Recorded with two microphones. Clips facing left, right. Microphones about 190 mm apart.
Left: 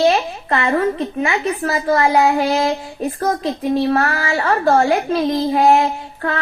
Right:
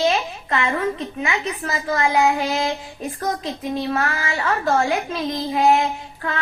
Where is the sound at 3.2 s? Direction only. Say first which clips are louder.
Left 5 dB; 55° left (ahead or behind).